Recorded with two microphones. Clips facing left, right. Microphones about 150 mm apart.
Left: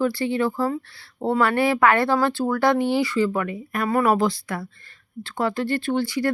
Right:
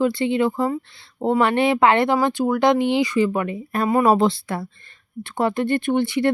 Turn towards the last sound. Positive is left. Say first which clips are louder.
# right 3 dB
turn(degrees=-25)  # may be behind; listen again after turning